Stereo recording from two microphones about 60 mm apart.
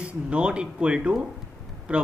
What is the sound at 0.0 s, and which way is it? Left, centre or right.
Speech, centre.